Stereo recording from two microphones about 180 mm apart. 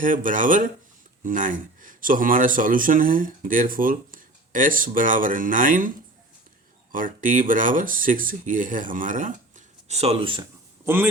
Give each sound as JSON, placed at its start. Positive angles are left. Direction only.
{"t": 0.0, "sound": "speech", "side_deg": -45}
{"t": 6.9, "sound": "speech", "side_deg": -50}
{"t": 10.8, "sound": "a man's voice", "side_deg": -15}